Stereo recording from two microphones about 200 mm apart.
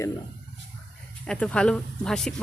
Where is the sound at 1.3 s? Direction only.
5° left (ahead or behind).